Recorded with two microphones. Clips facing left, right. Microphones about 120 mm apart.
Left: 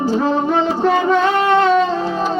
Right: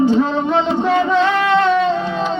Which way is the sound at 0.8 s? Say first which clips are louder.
Left 2 dB; 35° left (ahead or behind).